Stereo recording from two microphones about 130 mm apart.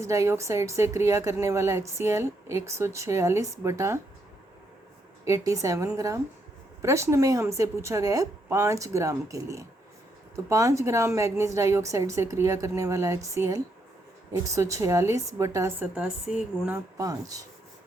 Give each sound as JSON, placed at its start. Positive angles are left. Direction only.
{"t": 0.0, "sound": "a woman's voice", "side_deg": -20}
{"t": 5.2, "sound": "a woman's voice", "side_deg": -25}
{"t": 16.0, "sound": "speech", "side_deg": -10}
{"t": 17.0, "sound": "a woman's voice", "side_deg": -25}